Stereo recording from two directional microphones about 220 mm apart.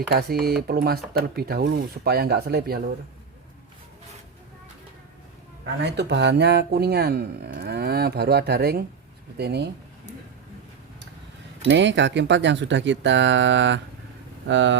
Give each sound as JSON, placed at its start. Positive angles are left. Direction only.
{"t": 0.1, "sound": "speech", "side_deg": -45}
{"t": 5.8, "sound": "speech", "side_deg": -50}
{"t": 11.7, "sound": "speech", "side_deg": -55}